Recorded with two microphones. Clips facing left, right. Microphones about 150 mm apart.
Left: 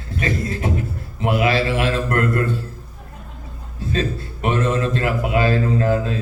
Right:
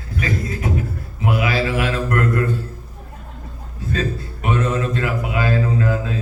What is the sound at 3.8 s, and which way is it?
A man's voice, 25° left (ahead or behind).